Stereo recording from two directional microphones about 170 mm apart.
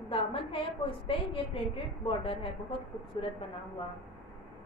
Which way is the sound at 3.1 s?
30° left (ahead or behind).